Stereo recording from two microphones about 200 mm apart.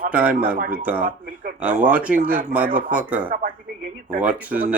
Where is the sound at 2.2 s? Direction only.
40° right (ahead or behind).